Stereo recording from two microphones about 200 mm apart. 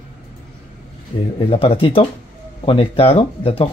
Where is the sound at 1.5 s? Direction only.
30° left (ahead or behind).